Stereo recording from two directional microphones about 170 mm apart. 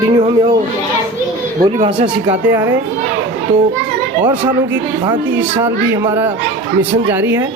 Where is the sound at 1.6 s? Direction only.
45° right (ahead or behind).